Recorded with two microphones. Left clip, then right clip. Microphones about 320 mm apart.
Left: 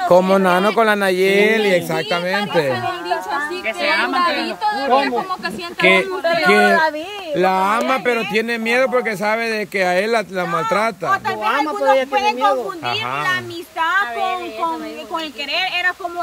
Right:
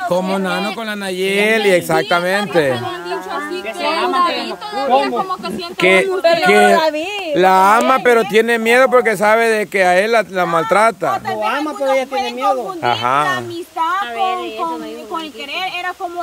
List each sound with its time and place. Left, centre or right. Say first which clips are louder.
0.1 s speech: left 8 dB; centre
5.8 s speech: right 2 dB; centre
6.2 s speech: right 4 dB; right
6.5 s speech: right 3 dB; centre
11.4 s a sound: left 2 dB; right
12.8 s speech: right 6 dB; centre